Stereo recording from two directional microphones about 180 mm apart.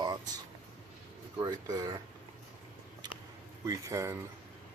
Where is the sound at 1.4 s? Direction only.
20° right (ahead or behind).